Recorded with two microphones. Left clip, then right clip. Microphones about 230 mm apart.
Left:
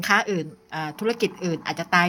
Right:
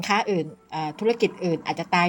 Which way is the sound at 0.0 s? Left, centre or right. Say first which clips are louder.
Left 2 dB; centre.